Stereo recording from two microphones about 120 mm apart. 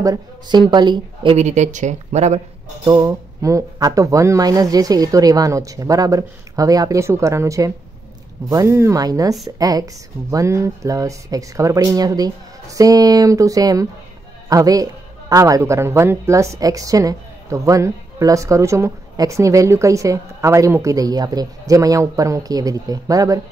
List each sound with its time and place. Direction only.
0.0 s a woman's voice: 35° right (ahead or behind)
1.3 s speech: 75° right (ahead or behind)
2.8 s a woman's voice: 35° right (ahead or behind)